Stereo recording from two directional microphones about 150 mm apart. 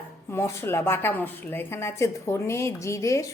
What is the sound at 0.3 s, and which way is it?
A woman's voice, 15° left (ahead or behind).